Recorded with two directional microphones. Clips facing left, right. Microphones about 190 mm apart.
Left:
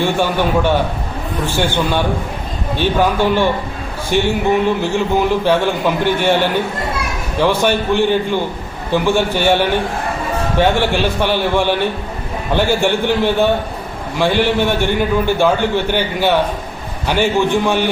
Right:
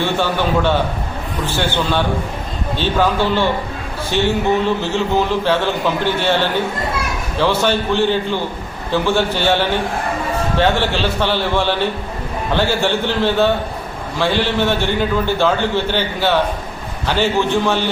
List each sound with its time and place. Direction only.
0.0 s a man's voice: 15° left (ahead or behind)